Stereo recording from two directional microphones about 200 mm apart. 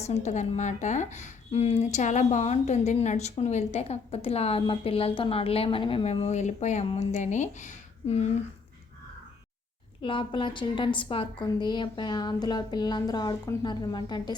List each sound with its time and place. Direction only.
0.0 s a woman's voice: 35° left (ahead or behind)
10.0 s a woman's voice: 25° left (ahead or behind)